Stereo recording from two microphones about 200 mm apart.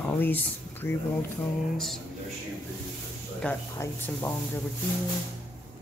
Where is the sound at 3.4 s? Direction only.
10° left (ahead or behind).